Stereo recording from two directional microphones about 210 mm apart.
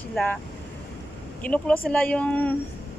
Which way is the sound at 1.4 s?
5° left (ahead or behind).